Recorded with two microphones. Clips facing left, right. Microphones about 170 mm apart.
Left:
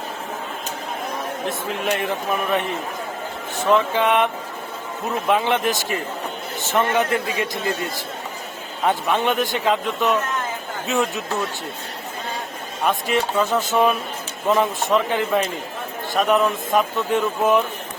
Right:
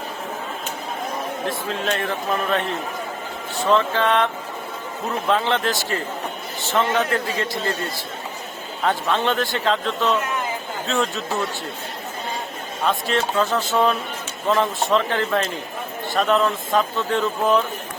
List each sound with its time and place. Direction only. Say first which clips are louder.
1.5 s a man's voice: left 1 dB; 15° left (ahead or behind)
5.3 s a man's voice: left 1 dB; 15° left (ahead or behind)
8.8 s a man's voice: left 1 dB; 15° left (ahead or behind)
12.8 s a man's voice: left 1 dB; 15° left (ahead or behind)